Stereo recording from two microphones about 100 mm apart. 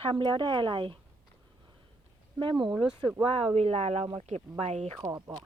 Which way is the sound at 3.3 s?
85° right.